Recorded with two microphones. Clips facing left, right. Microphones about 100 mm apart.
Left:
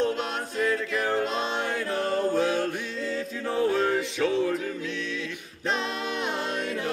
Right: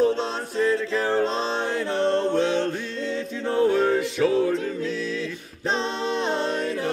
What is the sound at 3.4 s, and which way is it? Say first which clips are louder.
Music: right 4 dB; centre (ahead or behind).